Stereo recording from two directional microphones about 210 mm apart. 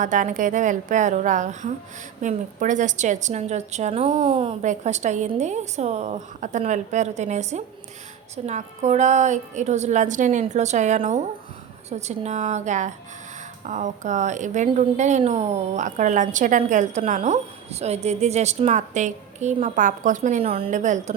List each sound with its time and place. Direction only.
0.0 s a woman's voice: 35° right (ahead or behind)